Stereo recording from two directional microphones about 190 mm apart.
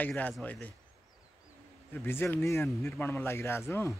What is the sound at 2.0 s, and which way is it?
Speech, 10° left (ahead or behind).